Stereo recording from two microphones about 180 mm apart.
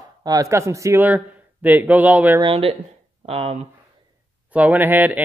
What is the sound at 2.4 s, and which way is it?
Speech, 30° right (ahead or behind).